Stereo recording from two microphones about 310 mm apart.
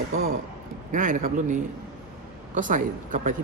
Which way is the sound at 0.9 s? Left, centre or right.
Right.